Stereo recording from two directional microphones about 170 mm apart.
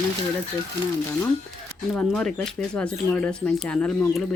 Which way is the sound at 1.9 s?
Centre (ahead or behind).